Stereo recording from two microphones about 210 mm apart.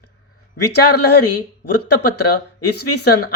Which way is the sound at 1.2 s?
90° left.